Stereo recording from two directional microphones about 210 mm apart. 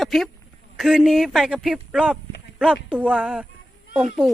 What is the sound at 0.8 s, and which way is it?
A woman's voice, 5° right (ahead or behind).